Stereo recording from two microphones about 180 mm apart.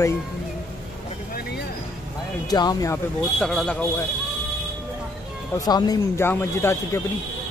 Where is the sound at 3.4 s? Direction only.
Centre (ahead or behind).